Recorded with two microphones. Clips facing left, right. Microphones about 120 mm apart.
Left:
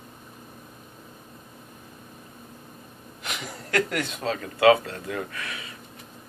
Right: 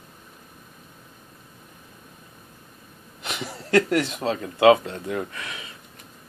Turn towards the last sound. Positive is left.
turn(degrees=-25)  # may be behind; listen again after turning